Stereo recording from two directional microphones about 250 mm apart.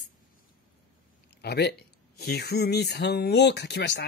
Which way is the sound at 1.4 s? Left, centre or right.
Left.